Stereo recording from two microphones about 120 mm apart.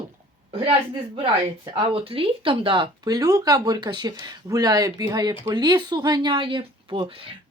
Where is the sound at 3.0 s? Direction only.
30° right (ahead or behind).